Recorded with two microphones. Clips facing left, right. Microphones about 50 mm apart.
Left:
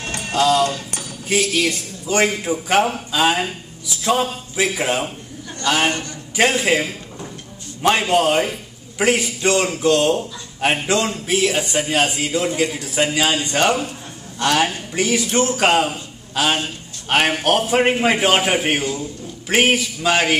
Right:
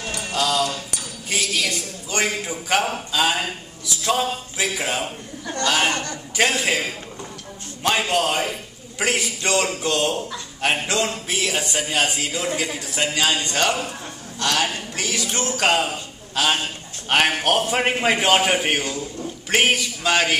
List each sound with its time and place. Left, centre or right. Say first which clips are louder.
0.0 s music: left 2 dB; left
0.4 s a man's voice: left 6 dB; left
8.9 s a man's voice: left 5 dB; centre